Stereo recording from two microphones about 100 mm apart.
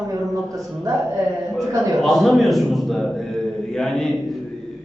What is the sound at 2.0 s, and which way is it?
A man's voice, centre (ahead or behind).